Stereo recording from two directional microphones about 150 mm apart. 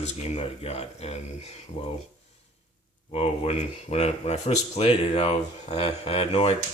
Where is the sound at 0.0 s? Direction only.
45° left (ahead or behind).